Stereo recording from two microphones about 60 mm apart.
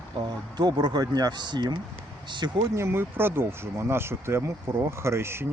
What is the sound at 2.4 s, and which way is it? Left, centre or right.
Speech, right.